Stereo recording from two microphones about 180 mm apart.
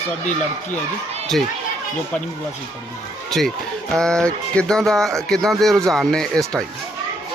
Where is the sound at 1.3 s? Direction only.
Centre (ahead or behind).